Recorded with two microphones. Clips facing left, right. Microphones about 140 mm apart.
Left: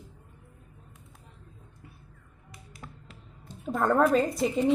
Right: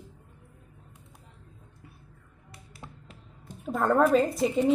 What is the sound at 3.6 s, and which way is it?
A woman's voice, centre (ahead or behind).